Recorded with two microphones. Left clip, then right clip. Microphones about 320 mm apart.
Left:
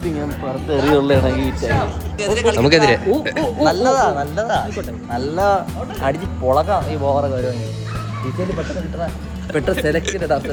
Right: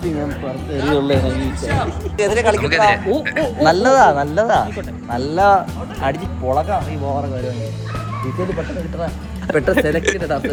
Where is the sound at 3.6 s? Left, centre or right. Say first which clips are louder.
Right 4 dB; right.